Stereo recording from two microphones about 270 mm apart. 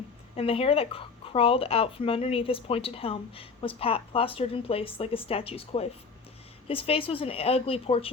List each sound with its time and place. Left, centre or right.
0.3 s speech: left